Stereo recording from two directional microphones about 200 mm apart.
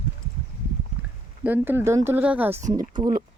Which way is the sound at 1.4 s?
10° right (ahead or behind).